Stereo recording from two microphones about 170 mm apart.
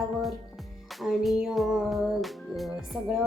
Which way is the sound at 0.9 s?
Centre (ahead or behind).